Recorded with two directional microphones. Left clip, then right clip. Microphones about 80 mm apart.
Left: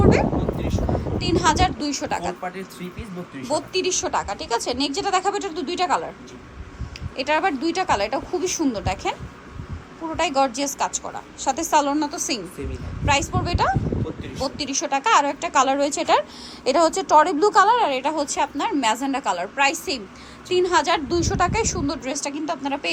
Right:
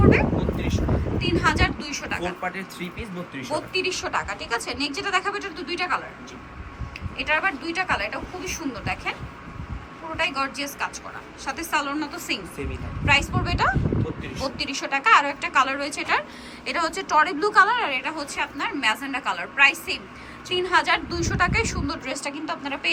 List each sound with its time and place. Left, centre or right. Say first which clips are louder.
0.0 s a sound: left 1 dB; left
1.2 s a woman's voice: left 3 dB; left
3.4 s a woman's voice: left 3 dB; left
7.3 s speech: left 3 dB; left
10.2 s a woman's voice: left 5 dB; left